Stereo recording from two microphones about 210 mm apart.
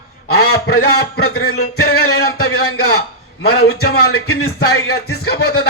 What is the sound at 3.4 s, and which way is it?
A man's voice, 50° left (ahead or behind).